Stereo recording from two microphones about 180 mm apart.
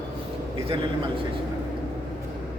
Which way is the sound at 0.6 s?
30° right (ahead or behind).